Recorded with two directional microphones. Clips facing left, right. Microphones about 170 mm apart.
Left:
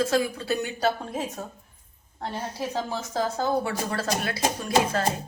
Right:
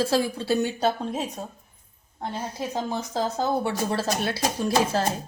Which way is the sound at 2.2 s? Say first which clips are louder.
Even; 15° right (ahead or behind).